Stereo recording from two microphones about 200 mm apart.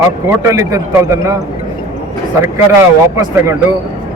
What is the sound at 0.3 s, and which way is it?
A man's voice, 15° right (ahead or behind).